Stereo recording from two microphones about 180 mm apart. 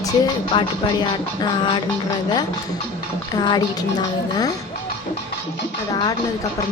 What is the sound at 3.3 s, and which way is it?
Speech, 25° left (ahead or behind).